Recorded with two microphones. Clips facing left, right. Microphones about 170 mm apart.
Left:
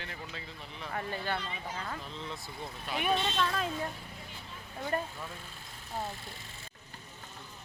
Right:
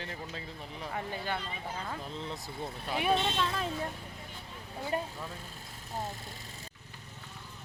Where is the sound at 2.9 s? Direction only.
25° right (ahead or behind).